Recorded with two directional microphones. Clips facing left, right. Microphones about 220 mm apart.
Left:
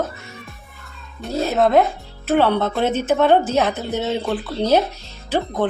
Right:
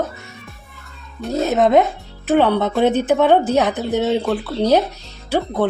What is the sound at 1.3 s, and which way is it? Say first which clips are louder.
Speech: right 2 dB; 15° right (ahead or behind).